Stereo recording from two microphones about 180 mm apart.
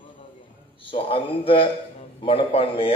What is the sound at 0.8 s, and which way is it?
A man's voice, 30° left (ahead or behind).